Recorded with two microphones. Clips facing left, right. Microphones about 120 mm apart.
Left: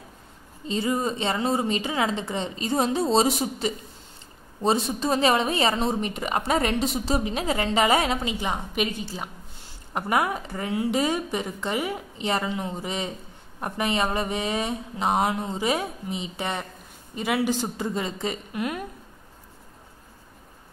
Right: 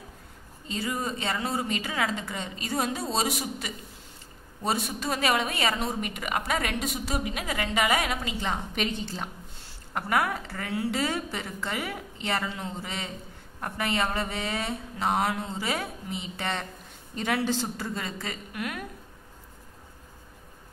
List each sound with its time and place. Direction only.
0.7 s a woman's voice: 25° left (ahead or behind); by 9.3 s 10° left (ahead or behind)
9.9 s a woman's voice: 20° left (ahead or behind)